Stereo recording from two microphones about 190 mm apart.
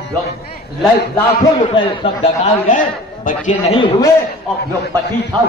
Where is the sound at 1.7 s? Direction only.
30° left (ahead or behind).